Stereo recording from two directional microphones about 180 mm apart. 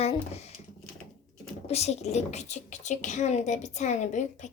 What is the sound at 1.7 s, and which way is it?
Speech, 35° left (ahead or behind).